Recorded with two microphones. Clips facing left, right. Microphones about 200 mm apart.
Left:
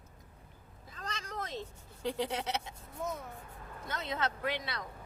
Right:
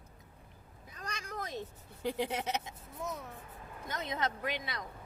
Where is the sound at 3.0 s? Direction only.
Centre (ahead or behind).